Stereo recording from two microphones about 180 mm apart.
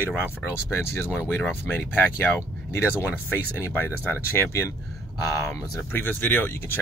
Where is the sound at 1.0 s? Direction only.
10° left (ahead or behind).